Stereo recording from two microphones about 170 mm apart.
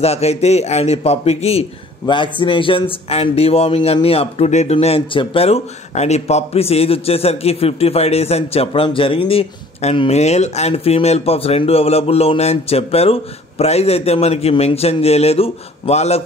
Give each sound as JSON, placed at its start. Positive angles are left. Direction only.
{"t": 0.0, "sound": "a man's voice", "side_deg": 40}